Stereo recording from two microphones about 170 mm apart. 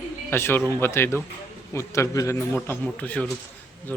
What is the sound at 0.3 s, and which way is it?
Speech, 15° left (ahead or behind).